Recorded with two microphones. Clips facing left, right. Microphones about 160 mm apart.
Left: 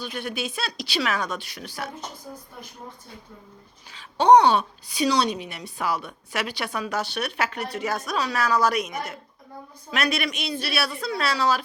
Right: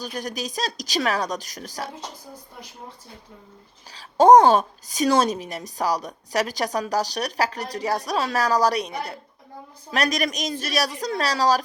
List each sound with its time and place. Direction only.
0.0 s a woman's voice: 40° right (ahead or behind)
3.9 s a woman's voice: 40° right (ahead or behind)